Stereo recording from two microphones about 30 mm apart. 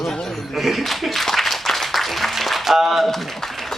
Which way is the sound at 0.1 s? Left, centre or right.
Centre.